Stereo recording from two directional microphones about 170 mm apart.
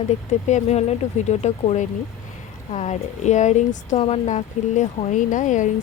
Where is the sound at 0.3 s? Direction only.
45° left (ahead or behind).